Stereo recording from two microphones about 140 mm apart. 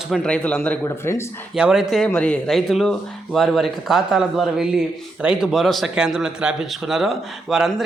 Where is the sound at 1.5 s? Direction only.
5° right (ahead or behind).